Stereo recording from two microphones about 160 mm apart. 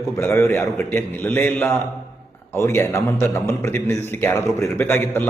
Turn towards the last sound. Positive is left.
turn(degrees=15)  # may be behind; listen again after turning